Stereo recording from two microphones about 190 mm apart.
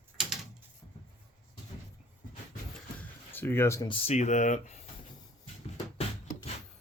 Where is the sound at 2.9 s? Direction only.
10° left (ahead or behind).